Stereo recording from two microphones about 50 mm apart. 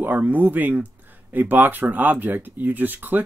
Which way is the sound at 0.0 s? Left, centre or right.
Right.